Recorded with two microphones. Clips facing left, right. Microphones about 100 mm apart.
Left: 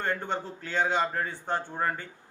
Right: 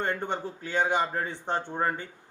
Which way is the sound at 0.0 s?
15° right (ahead or behind).